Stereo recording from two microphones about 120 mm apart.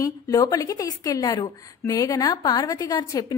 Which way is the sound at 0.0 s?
30° left (ahead or behind).